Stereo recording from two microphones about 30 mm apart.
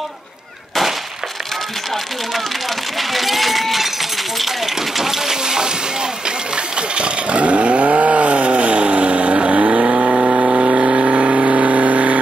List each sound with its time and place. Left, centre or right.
3.0 s a sound: centre
4.4 s breaking: centre; by 5.7 s right
6.2 s vehicle: right